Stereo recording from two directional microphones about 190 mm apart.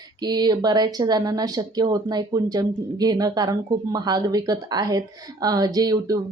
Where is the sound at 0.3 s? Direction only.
20° right (ahead or behind).